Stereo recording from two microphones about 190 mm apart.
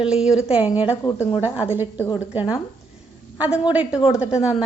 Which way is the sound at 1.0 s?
15° left (ahead or behind).